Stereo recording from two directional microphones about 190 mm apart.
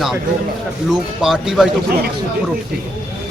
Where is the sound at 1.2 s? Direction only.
Centre (ahead or behind).